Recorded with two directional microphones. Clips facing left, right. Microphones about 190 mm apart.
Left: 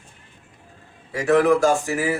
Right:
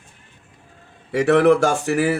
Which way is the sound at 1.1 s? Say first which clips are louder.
Right 3 dB; 70° right (ahead or behind).